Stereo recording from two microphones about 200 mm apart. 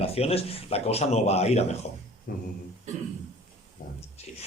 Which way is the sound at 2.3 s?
45° left (ahead or behind).